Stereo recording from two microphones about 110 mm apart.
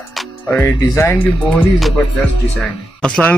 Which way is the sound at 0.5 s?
20° left (ahead or behind).